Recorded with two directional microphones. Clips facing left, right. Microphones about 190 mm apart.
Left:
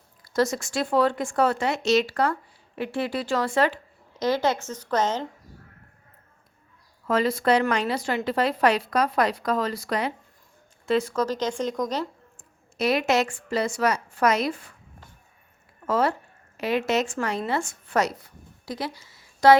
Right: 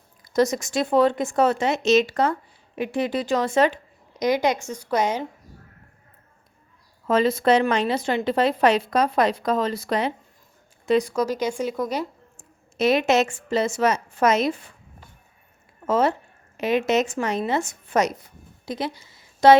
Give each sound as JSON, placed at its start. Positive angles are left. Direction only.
{"t": 0.3, "sound": "a woman's voice", "side_deg": -20}
{"t": 7.1, "sound": "a woman's voice", "side_deg": -25}
{"t": 12.7, "sound": "a woman's voice", "side_deg": -25}
{"t": 15.9, "sound": "a woman's voice", "side_deg": -20}
{"t": 18.6, "sound": "a sound", "side_deg": -20}